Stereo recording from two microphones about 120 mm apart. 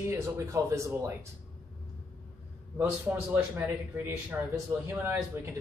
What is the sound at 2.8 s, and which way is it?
A man's voice, 15° right (ahead or behind).